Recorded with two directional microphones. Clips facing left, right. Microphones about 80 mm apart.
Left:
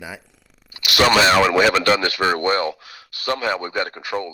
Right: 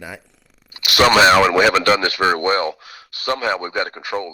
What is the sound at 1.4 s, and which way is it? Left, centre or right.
A man's voice, right.